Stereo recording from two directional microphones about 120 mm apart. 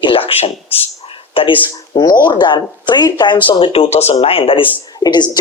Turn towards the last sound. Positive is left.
turn(degrees=35)  # may be behind; listen again after turning